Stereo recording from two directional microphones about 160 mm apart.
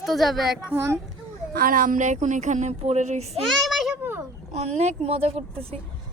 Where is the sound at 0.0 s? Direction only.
Centre (ahead or behind).